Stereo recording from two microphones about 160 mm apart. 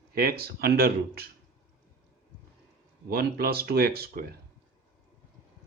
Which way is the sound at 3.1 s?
70° right (ahead or behind).